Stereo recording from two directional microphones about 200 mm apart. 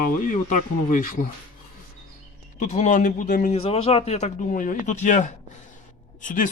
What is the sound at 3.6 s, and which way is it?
Speech, 30° left (ahead or behind).